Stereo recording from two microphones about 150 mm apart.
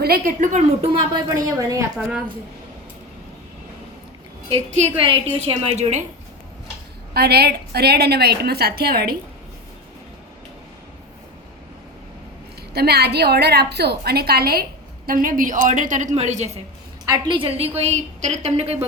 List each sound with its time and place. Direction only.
0.0 s a woman's voice: 80° right; by 0.9 s 55° right (ahead or behind)
1.3 s a woman's voice: 20° right (ahead or behind)
2.0 s a woman's voice: 5° right (ahead or behind)
4.4 s a woman's voice: 45° right (ahead or behind)
7.1 s a woman's voice: 90° right
12.7 s a woman's voice: 90° right
15.0 s a woman's voice: 70° right (ahead or behind); by 16.5 s 50° right (ahead or behind)
17.1 s a woman's voice: 30° right (ahead or behind)